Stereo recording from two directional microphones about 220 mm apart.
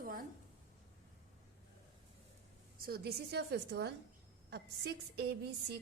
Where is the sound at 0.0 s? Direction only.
40° right (ahead or behind).